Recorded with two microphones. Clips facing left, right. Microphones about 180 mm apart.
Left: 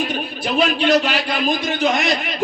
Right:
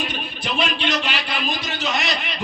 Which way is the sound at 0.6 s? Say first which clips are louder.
Left 8 dB; 40° left (ahead or behind).